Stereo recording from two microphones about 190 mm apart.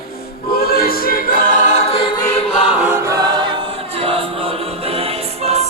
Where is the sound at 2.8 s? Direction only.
15° right (ahead or behind); by 4.5 s 30° right (ahead or behind).